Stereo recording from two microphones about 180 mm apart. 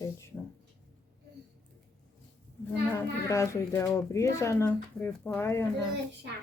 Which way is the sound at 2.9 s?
15° left (ahead or behind).